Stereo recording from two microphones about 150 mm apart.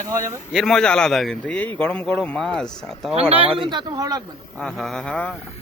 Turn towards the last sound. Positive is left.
turn(degrees=5)  # may be behind; listen again after turning